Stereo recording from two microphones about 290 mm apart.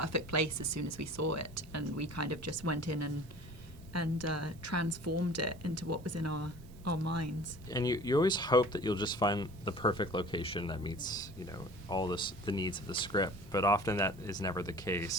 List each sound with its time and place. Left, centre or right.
0.0 s a woman's voice: right
7.7 s speech: centre